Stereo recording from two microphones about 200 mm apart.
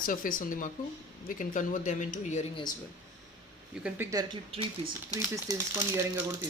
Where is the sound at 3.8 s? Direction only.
10° right (ahead or behind).